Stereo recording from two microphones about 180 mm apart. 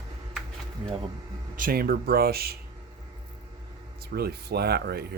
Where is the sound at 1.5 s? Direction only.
55° right (ahead or behind).